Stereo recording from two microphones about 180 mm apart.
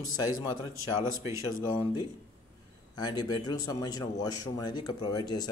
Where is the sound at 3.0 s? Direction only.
25° left (ahead or behind).